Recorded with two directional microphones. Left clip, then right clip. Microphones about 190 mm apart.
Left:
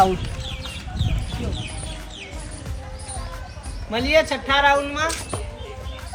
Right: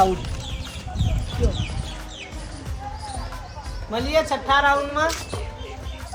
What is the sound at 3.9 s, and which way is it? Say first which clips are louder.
A woman's voice: left 3 dB; 20° right (ahead or behind).